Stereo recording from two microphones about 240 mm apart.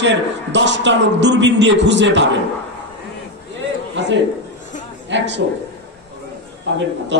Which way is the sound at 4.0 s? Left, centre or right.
Right.